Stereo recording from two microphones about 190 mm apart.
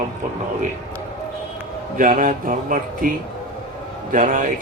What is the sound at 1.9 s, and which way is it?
Speech, 45° right (ahead or behind).